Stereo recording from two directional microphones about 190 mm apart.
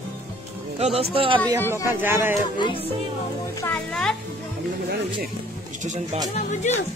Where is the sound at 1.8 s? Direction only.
10° right (ahead or behind).